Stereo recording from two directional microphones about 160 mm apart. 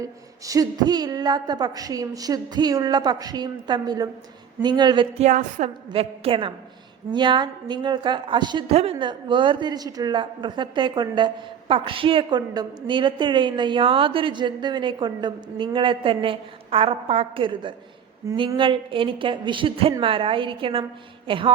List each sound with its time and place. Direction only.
0.0 s speech: 20° right (ahead or behind)
5.2 s a woman's voice: 45° right (ahead or behind)
5.9 s a woman's voice: 35° right (ahead or behind)
21.2 s a sound: 35° right (ahead or behind)